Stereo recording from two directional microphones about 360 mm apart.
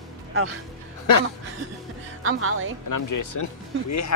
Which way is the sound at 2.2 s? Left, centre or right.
Right.